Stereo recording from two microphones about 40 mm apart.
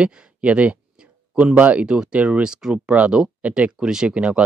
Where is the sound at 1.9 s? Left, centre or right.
Centre.